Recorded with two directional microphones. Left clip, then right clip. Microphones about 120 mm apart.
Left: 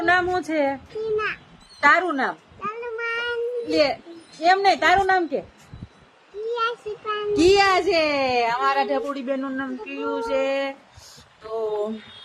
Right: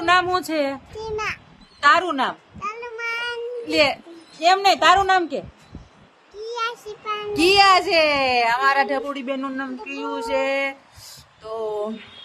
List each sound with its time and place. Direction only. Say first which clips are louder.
0.0 s a child's voice: right 2 dB; 15° right (ahead or behind)
1.8 s meow: right 1 dB; 10° right (ahead or behind)
4.4 s a woman's voice: right 2 dB; 10° right (ahead or behind)
6.5 s a woman's voice: left 2 dB; 15° right (ahead or behind)
9.1 s a sound: even; centre (ahead or behind)